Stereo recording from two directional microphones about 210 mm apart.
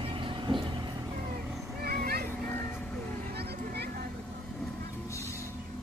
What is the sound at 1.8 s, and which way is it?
Children playing, 45° right (ahead or behind).